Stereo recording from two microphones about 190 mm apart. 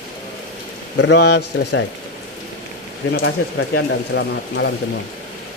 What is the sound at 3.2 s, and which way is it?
Speech, 90° left.